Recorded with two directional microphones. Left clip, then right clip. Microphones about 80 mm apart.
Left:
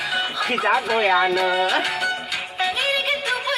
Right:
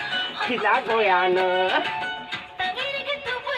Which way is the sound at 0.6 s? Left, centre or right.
Right.